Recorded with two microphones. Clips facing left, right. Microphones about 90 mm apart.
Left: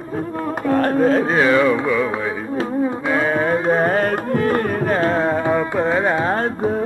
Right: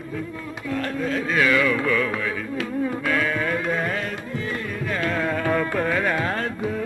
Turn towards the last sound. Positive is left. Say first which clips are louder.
# left 6 dB
turn(degrees=35)  # may be behind; listen again after turning